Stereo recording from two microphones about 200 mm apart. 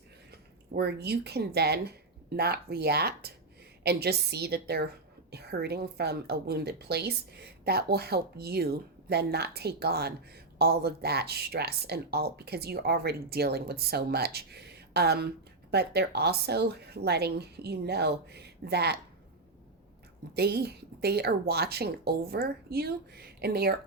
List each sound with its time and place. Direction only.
0.3 s speech: 55° right (ahead or behind)
20.3 s speech: 55° right (ahead or behind)